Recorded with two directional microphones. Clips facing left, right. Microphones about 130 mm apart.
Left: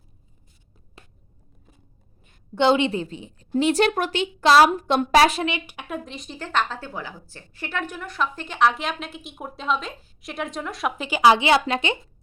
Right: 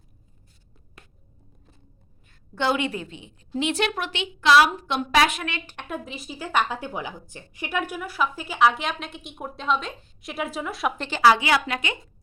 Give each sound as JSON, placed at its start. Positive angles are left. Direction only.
{"t": 2.2, "sound": "a woman's voice", "side_deg": 20}
{"t": 5.5, "sound": "a woman's voice", "side_deg": 15}
{"t": 5.9, "sound": "a woman's voice", "side_deg": -5}
{"t": 11.2, "sound": "a woman's voice", "side_deg": 20}